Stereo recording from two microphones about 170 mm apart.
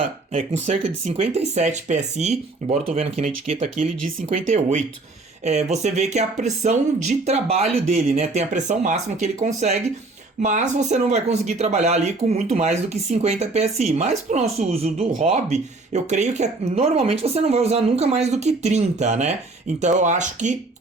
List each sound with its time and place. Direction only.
0.3 s speech: 40° right (ahead or behind)